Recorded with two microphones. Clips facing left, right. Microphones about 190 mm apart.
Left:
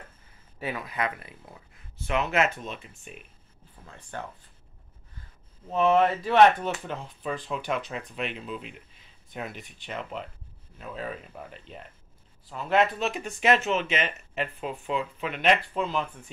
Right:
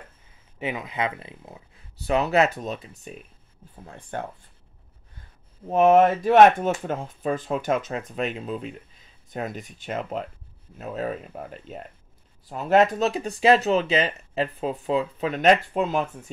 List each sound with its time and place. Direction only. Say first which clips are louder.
0.6 s speech: right 3 dB; 20° right (ahead or behind)
2.0 s speech: right 5 dB; 35° right (ahead or behind)
3.8 s speech: right 5 dB; 50° right (ahead or behind)
5.7 s speech: right 5 dB; 50° right (ahead or behind)